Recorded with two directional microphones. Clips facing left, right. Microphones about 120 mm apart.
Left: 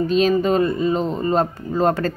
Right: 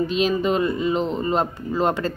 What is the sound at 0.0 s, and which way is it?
Speech, 40° left (ahead or behind).